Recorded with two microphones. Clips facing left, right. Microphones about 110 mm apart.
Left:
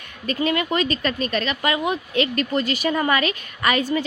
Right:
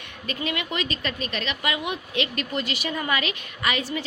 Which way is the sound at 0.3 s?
40° left (ahead or behind).